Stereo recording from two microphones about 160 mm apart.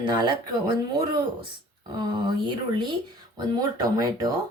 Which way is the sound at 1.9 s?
30° right (ahead or behind).